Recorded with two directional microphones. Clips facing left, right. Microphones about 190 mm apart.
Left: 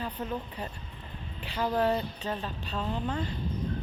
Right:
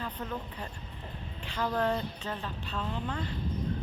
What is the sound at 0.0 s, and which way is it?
A woman's voice, 20° left (ahead or behind).